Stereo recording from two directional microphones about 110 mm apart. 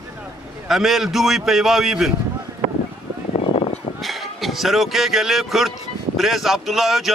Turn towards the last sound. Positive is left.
turn(degrees=0)  # may be behind; listen again after turning